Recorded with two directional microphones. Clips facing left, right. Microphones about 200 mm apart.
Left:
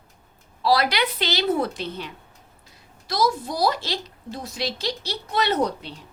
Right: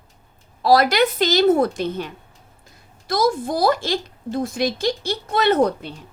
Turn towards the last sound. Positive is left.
turn(degrees=-50)  # may be behind; listen again after turning